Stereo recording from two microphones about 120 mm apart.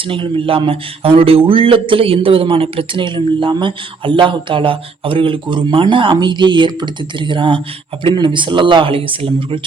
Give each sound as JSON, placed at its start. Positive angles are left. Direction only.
{"t": 0.1, "sound": "a man's voice", "side_deg": -45}